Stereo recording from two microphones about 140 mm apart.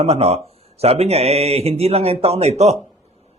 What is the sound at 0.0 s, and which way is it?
A man's voice, 50° right (ahead or behind).